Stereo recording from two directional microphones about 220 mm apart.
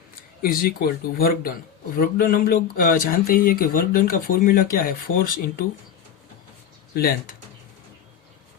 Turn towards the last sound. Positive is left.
turn(degrees=45)  # may be behind; listen again after turning